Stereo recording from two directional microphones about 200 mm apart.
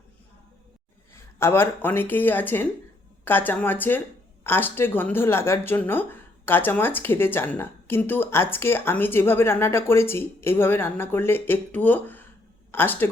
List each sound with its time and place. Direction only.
1.1 s speech: 10° left (ahead or behind)